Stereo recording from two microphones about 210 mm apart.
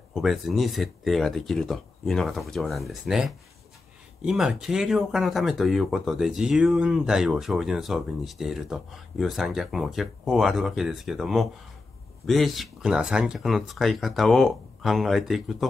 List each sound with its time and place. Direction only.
0.1 s speech: centre (ahead or behind)